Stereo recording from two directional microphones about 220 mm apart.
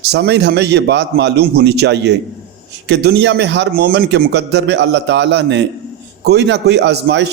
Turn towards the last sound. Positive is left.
turn(degrees=-50)  # may be behind; listen again after turning